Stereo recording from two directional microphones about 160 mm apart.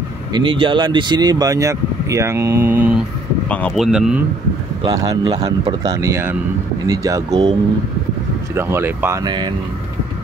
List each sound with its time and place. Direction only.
0.3 s speech: 30° right (ahead or behind); by 3.0 s 10° right (ahead or behind)
3.4 s speech: 10° left (ahead or behind)
3.8 s a man's voice: 5° right (ahead or behind)
4.8 s speech: 20° right (ahead or behind)
8.5 s speech: 15° right (ahead or behind)
9.2 s speech: 25° right (ahead or behind)